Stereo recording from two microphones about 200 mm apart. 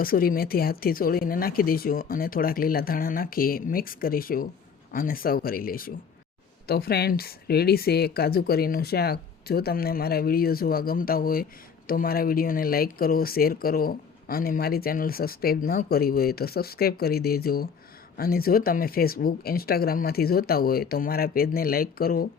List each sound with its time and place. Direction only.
0.0 s speech: 45° left (ahead or behind)